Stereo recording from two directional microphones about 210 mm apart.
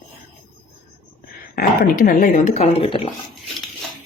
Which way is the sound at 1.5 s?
40° left (ahead or behind).